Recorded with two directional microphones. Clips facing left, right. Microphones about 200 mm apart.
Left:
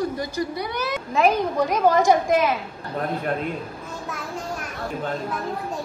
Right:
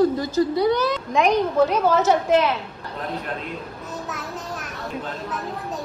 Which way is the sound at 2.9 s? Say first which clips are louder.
Left 4 dB; 50° left (ahead or behind).